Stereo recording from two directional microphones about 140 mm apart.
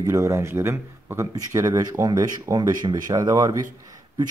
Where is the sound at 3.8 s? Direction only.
25° right (ahead or behind).